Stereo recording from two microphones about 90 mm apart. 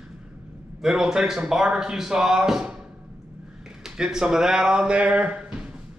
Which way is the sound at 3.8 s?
5° right (ahead or behind).